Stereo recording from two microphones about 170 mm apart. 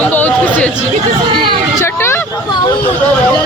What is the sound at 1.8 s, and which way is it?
Speech, 15° left (ahead or behind).